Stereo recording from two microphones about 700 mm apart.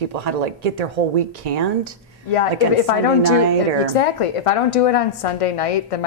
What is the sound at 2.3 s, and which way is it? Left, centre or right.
Speech, left.